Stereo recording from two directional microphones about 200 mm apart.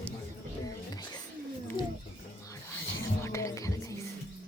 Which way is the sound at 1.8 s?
25° left (ahead or behind).